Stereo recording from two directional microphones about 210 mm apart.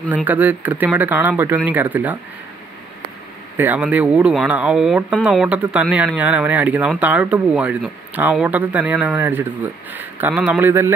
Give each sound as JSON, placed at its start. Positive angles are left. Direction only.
{"t": 0.1, "sound": "speech", "side_deg": -10}
{"t": 3.5, "sound": "speech", "side_deg": -10}